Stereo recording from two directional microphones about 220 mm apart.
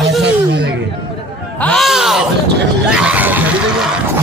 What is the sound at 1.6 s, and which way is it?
Speech, centre (ahead or behind).